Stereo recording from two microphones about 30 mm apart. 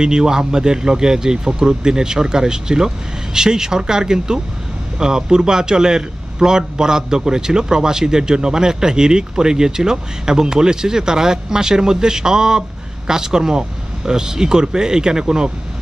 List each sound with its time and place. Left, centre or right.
0.0 s a man's voice: right